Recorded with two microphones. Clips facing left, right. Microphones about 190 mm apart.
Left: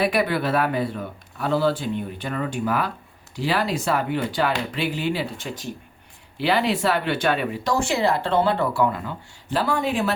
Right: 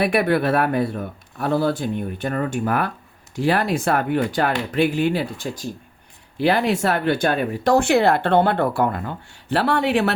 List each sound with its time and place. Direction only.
0.0 s speech: 55° right (ahead or behind)
6.3 s speech: 50° right (ahead or behind)
7.6 s speech: 60° right (ahead or behind)